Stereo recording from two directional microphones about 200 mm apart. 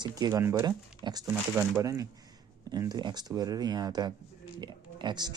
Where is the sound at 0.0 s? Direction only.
20° right (ahead or behind).